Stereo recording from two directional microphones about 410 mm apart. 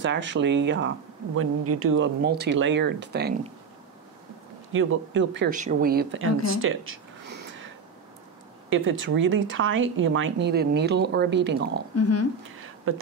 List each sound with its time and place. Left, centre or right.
0.0 s speech: right
4.7 s speech: right
8.6 s speech: right
11.9 s speech: left
12.9 s speech: right